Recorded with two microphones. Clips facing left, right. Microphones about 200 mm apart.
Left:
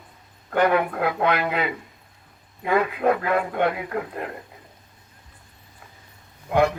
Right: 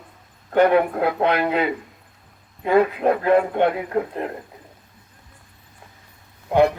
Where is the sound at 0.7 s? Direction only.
30° right (ahead or behind).